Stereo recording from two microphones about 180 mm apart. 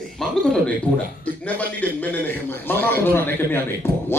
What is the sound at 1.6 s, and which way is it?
A man's voice, 10° left (ahead or behind).